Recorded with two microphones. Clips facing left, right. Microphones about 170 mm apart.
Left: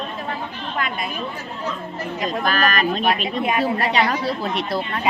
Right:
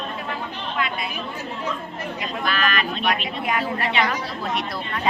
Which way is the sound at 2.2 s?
40° left (ahead or behind).